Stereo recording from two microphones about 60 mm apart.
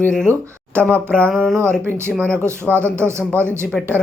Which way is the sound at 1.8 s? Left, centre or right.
Right.